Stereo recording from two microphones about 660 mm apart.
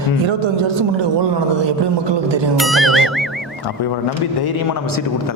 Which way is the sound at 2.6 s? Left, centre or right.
Centre.